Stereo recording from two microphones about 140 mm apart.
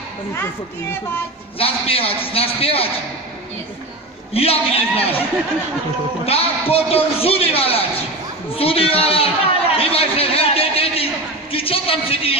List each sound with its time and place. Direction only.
1.6 s a man's voice: 40° left (ahead or behind)
4.3 s a man's voice: 45° left (ahead or behind)
6.2 s a man's voice: 45° left (ahead or behind)
11.5 s a sound: 40° left (ahead or behind)